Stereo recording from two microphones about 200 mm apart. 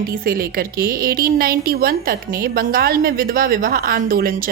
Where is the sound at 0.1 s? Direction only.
45° right (ahead or behind).